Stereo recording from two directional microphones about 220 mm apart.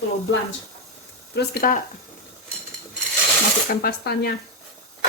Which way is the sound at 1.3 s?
45° left (ahead or behind).